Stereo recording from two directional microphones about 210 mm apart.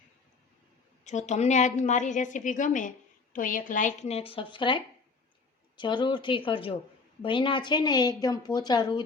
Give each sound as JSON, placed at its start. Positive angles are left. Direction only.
{"t": 1.0, "sound": "a woman's voice", "side_deg": 35}